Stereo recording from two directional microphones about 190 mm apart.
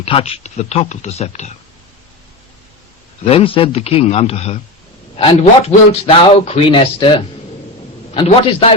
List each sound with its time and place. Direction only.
0.0 s a man's voice: 30° left (ahead or behind)
3.2 s a man's voice: 30° left (ahead or behind)
8.1 s a man's voice: 30° left (ahead or behind)